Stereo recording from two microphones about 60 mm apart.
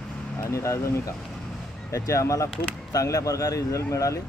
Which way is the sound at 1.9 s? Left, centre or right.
Left.